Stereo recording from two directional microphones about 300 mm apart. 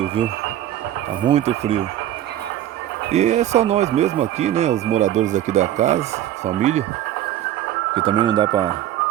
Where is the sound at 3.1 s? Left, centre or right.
Right.